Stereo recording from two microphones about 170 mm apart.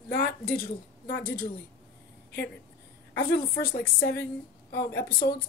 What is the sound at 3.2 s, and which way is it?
Speech, 65° left (ahead or behind).